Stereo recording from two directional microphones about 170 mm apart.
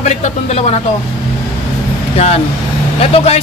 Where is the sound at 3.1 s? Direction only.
35° left (ahead or behind).